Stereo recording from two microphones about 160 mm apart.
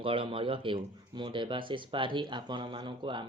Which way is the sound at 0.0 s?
35° right (ahead or behind).